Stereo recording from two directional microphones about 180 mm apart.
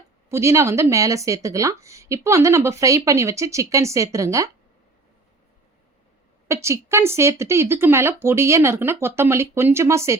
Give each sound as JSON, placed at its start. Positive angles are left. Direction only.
{"t": 0.3, "sound": "speech", "side_deg": -15}
{"t": 6.5, "sound": "speech", "side_deg": -15}